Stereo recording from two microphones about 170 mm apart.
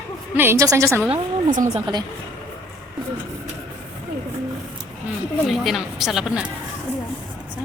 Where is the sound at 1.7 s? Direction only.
30° right (ahead or behind).